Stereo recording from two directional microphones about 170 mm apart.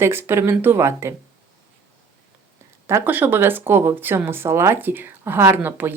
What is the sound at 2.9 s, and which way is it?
Speech, 15° right (ahead or behind).